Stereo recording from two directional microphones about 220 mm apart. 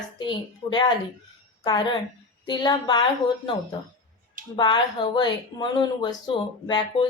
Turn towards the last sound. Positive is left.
turn(degrees=20)  # may be behind; listen again after turning